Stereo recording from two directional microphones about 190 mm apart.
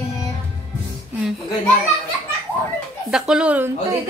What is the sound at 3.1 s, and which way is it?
Speech, 5° right (ahead or behind).